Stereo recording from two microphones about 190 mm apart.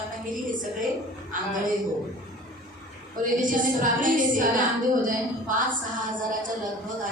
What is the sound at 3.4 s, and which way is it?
Speech, 45° right (ahead or behind).